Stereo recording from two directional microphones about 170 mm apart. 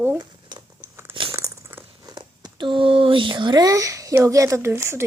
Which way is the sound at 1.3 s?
20° right (ahead or behind).